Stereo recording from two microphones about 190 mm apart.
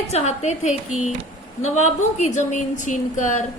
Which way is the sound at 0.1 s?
35° left (ahead or behind).